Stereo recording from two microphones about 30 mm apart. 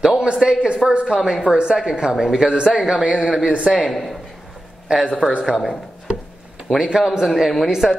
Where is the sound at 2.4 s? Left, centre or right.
Right.